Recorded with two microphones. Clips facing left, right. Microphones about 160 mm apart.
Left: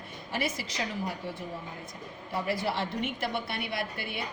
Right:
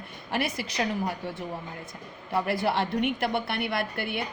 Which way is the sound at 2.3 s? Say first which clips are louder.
Right 5 dB; 60° right (ahead or behind).